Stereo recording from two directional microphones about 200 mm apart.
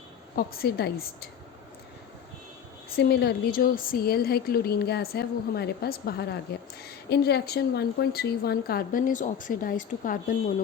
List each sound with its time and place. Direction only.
0.3 s a woman's voice: 50° left (ahead or behind)
2.9 s a woman's voice: 55° left (ahead or behind)